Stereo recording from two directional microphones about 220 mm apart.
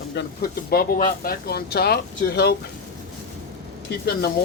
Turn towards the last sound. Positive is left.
turn(degrees=50)  # may be behind; listen again after turning